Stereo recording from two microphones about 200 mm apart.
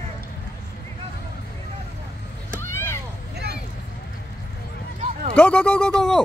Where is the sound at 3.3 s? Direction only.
55° right (ahead or behind).